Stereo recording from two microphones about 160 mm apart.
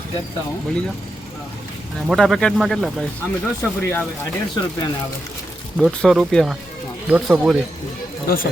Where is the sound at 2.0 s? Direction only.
Centre (ahead or behind).